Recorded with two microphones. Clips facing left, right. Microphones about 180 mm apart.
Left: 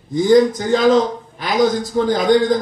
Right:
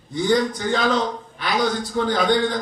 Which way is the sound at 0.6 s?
40° left (ahead or behind).